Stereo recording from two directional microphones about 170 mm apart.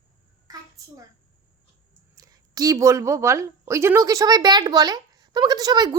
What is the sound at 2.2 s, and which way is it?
A woman's voice, 20° right (ahead or behind).